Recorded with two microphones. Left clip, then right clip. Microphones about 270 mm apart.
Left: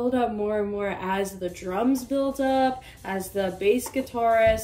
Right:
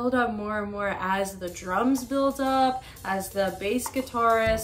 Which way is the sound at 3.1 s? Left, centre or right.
Right.